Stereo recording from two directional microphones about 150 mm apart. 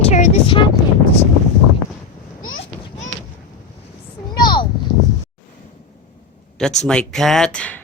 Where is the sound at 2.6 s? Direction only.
50° left (ahead or behind).